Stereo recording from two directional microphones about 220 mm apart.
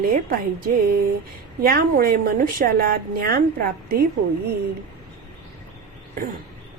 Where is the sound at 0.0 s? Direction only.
40° right (ahead or behind).